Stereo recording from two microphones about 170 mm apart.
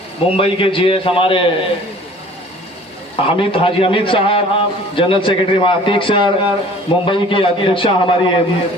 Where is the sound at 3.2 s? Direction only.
30° left (ahead or behind).